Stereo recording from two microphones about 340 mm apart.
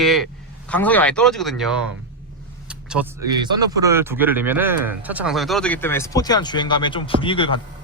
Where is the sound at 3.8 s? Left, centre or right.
Centre.